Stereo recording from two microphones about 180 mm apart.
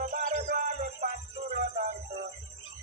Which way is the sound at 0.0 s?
45° right (ahead or behind).